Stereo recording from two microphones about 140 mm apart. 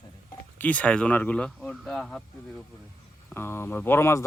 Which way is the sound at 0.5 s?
10° left (ahead or behind).